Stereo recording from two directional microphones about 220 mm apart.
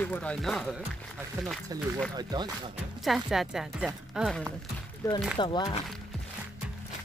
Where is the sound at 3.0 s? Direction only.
Centre (ahead or behind).